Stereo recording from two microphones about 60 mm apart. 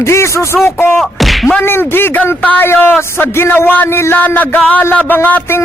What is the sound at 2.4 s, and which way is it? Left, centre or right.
A man's voice, left.